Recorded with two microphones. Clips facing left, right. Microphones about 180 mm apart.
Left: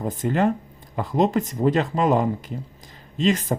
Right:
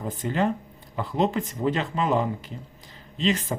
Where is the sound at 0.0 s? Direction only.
45° left (ahead or behind).